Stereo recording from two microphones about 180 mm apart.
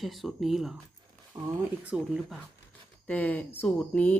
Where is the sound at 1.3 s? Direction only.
20° right (ahead or behind).